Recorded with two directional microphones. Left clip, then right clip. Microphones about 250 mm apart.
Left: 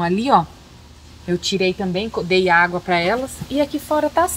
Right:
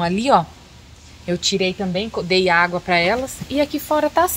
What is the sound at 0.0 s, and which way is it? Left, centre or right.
Speech, centre.